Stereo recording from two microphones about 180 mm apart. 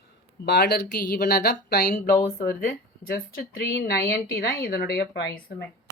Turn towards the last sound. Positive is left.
turn(degrees=60)  # may be behind; listen again after turning